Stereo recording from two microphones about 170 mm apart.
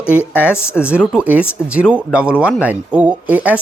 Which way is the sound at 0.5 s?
15° left (ahead or behind).